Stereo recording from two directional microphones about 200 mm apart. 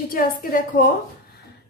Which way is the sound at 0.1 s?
45° left (ahead or behind).